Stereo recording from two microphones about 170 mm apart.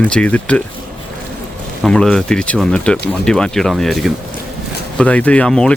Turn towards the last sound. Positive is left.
turn(degrees=5)  # may be behind; listen again after turning